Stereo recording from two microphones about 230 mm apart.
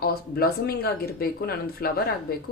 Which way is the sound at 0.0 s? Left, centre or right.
Left.